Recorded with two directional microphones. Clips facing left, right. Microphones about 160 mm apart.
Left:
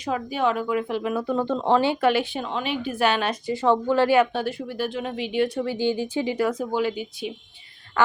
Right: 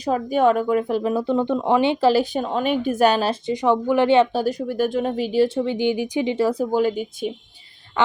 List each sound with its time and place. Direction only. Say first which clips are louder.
0.0 s speech: right 6 dB; 45° right (ahead or behind)
1.1 s speech: right 2 dB; 20° right (ahead or behind); by 3.3 s 40° right (ahead or behind)
3.4 s speech: right 2 dB; 15° right (ahead or behind); by 5.5 s 40° right (ahead or behind)
5.5 s speech: right 3 dB; 20° right (ahead or behind); by 7.3 s 45° right (ahead or behind)
8.0 s a sound: right 1 dB; 20° right (ahead or behind)